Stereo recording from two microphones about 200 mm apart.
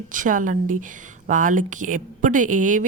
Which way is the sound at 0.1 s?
40° right (ahead or behind).